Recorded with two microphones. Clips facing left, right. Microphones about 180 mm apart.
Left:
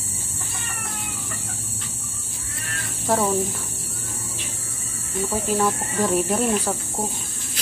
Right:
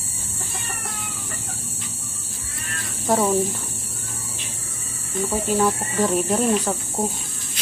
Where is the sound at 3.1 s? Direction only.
10° right (ahead or behind).